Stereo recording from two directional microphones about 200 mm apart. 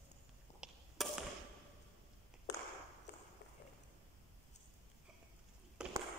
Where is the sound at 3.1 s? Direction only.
55° left (ahead or behind).